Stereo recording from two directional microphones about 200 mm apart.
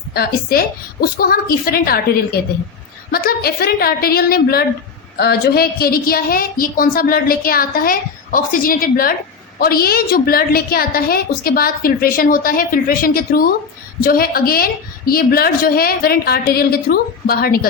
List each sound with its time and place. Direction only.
0.1 s a woman's voice: 50° left (ahead or behind)
3.1 s a woman's voice: 50° left (ahead or behind)